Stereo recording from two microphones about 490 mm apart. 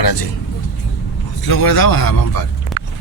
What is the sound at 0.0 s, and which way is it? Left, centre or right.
Speech, left.